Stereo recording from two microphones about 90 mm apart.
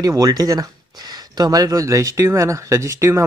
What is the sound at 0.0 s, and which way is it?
Speech, 45° right (ahead or behind).